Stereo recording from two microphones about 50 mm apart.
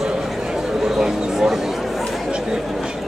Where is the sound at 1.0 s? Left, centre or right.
Centre.